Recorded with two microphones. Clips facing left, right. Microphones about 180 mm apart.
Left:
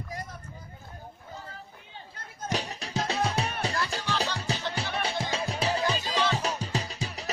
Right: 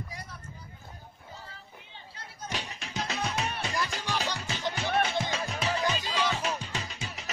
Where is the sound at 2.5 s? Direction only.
35° left (ahead or behind).